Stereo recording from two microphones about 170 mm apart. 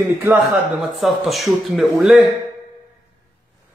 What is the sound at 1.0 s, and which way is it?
Speech, centre (ahead or behind).